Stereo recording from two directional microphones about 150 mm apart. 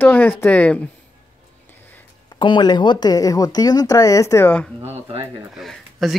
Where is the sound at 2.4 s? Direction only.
30° left (ahead or behind).